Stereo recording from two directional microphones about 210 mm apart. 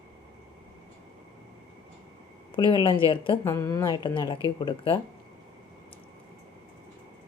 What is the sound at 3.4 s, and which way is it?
Speech, 10° left (ahead or behind).